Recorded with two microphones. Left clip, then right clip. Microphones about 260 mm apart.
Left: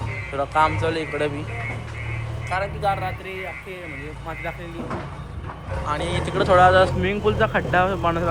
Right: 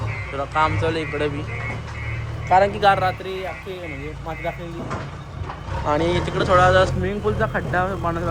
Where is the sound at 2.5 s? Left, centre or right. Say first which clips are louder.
Right 8 dB; right.